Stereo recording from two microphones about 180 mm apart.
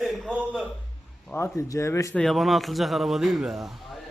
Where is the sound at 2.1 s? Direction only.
Centre (ahead or behind).